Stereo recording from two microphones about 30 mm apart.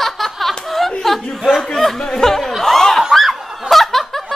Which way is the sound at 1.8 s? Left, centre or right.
Centre.